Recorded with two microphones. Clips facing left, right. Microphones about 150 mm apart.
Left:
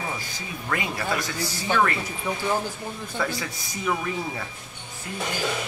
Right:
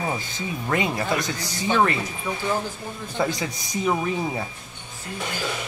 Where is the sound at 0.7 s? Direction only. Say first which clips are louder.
Right 3 dB; 25° right (ahead or behind).